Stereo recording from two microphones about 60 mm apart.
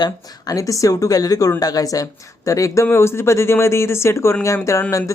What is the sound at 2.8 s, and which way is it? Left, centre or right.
Speech, left.